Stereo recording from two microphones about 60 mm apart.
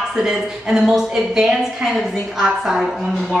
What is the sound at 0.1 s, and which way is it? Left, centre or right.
A woman's voice, centre.